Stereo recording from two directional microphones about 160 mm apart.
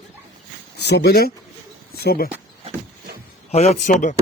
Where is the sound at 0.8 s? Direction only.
90° left; by 2.3 s 75° left (ahead or behind).